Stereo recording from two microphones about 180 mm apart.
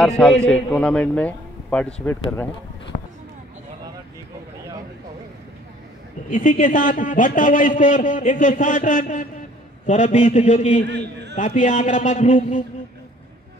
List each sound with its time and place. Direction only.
0.2 s a man's voice: 5° left (ahead or behind)
6.3 s a man's voice: 45° left (ahead or behind)
10.9 s a man's voice: 70° right (ahead or behind)
11.3 s a man's voice: 45° left (ahead or behind)